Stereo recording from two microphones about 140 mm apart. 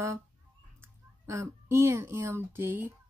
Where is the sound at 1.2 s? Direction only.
20° right (ahead or behind).